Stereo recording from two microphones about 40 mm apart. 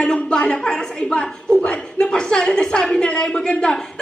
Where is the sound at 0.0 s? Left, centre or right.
Left.